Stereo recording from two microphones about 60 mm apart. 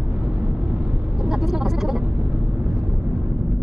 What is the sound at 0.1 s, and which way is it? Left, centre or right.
Vehicle, centre.